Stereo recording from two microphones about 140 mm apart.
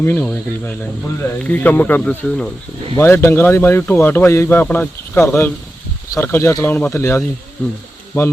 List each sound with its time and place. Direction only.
0.0 s speech: 15° left (ahead or behind)